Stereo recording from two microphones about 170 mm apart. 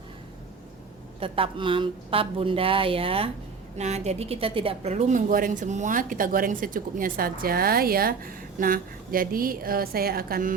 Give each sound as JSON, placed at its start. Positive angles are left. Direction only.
{"t": 1.2, "sound": "a woman's voice", "side_deg": -30}